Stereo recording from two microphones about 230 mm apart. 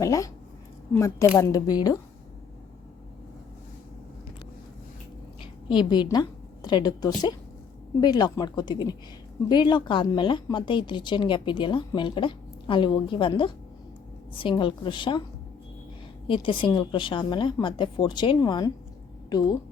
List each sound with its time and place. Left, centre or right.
0.0 s speech: centre
5.4 s a woman's voice: left
16.2 s a woman's voice: left